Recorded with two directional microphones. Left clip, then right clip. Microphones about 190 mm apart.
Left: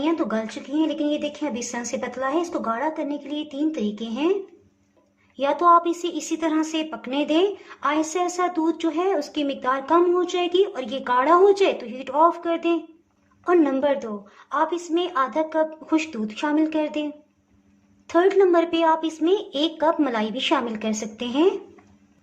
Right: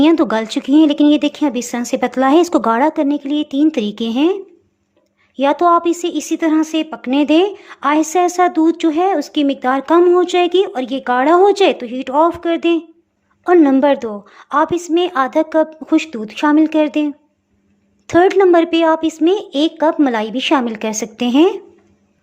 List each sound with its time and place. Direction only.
0.0 s speech: 45° right (ahead or behind)
5.4 s a woman's voice: 30° right (ahead or behind)